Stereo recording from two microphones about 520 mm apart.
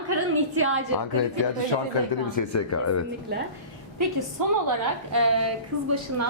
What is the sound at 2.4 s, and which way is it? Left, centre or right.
Speech, left.